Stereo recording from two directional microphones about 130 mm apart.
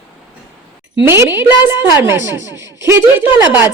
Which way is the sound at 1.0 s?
20° right (ahead or behind).